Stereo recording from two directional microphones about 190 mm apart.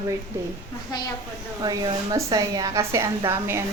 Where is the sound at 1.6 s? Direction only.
20° right (ahead or behind).